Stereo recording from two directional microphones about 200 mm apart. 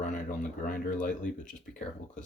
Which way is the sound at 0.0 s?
40° left (ahead or behind).